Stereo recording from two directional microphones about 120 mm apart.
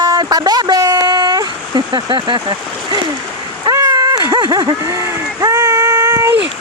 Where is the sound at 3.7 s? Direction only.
30° right (ahead or behind).